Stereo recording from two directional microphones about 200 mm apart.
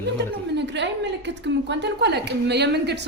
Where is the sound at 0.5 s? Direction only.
60° right (ahead or behind).